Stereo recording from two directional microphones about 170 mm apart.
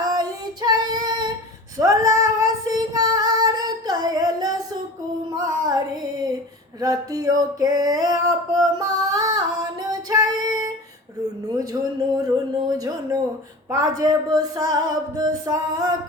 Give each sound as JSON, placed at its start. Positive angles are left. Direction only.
{"t": 0.0, "sound": "child singing", "side_deg": -20}
{"t": 1.8, "sound": "female singing", "side_deg": -20}
{"t": 5.5, "sound": "music", "side_deg": -20}
{"t": 6.7, "sound": "a sound", "side_deg": -20}
{"t": 9.8, "sound": "female singing", "side_deg": -20}
{"t": 11.2, "sound": "a sound", "side_deg": -20}